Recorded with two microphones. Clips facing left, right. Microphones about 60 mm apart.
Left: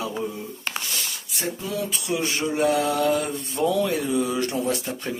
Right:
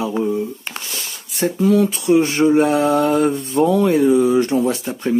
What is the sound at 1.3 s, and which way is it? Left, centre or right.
Speech, right.